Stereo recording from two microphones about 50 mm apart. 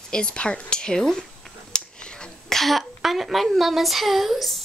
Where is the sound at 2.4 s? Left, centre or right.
Centre.